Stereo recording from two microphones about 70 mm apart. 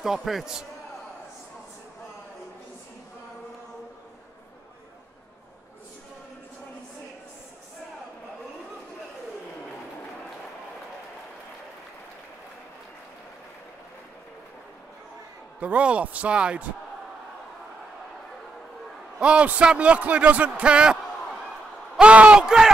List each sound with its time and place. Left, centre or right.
0.0 s a man's voice: centre
15.6 s speech: centre
19.1 s a man's voice: centre
21.9 s a sound: centre